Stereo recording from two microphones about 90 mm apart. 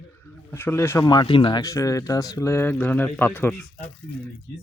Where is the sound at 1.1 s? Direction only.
60° left (ahead or behind).